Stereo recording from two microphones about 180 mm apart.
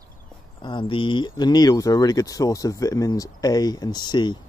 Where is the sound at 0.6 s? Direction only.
25° left (ahead or behind).